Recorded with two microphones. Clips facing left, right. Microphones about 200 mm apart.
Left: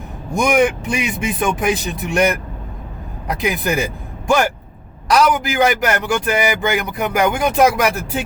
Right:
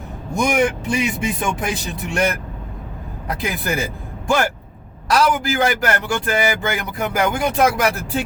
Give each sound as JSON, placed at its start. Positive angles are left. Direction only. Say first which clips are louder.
{"t": 0.3, "sound": "speech", "louder": "left 3 dB", "side_deg": 20}